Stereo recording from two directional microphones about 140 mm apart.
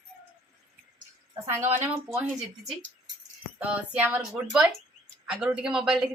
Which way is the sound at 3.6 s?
10° right (ahead or behind).